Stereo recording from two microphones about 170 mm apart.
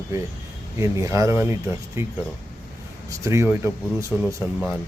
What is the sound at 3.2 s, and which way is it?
A man's voice, 15° right (ahead or behind).